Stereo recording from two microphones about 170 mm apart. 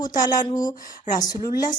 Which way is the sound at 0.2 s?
25° left (ahead or behind).